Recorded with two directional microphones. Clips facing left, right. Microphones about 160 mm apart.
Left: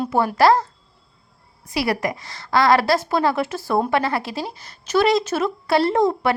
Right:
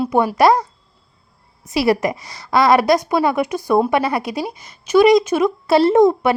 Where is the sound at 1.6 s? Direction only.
25° right (ahead or behind).